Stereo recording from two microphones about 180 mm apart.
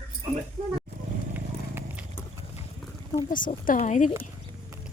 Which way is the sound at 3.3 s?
50° left (ahead or behind).